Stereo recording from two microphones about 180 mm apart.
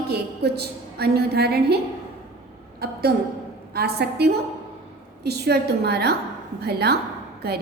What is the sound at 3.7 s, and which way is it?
A woman's voice, 65° right (ahead or behind).